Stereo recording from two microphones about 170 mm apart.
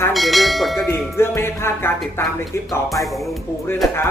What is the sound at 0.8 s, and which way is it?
Speech, 15° left (ahead or behind).